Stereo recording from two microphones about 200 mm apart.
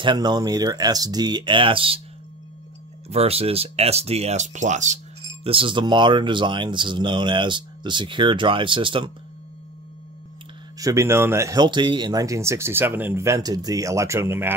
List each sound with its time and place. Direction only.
0.0 s speech: 20° right (ahead or behind)
3.1 s speech: 30° right (ahead or behind)
10.8 s speech: 15° right (ahead or behind)